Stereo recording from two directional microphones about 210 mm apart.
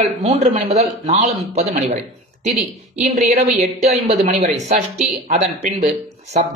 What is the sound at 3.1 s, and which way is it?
A man's voice, 35° right (ahead or behind).